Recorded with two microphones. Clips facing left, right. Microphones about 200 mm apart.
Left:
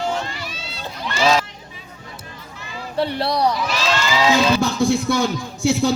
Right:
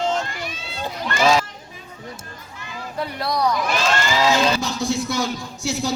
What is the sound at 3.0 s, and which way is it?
Speech, 30° left (ahead or behind).